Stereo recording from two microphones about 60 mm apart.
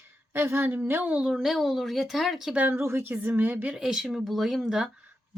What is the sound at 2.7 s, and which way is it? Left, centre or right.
Speech, right.